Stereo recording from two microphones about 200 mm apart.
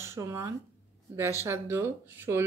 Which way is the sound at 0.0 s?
15° right (ahead or behind).